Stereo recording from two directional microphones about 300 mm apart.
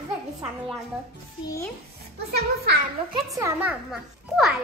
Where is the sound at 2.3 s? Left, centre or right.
Right.